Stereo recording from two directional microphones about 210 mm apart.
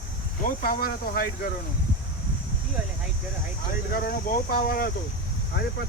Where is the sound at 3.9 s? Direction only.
45° left (ahead or behind).